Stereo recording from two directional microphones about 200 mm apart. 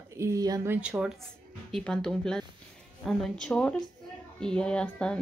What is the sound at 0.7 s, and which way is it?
A woman's voice, 5° right (ahead or behind).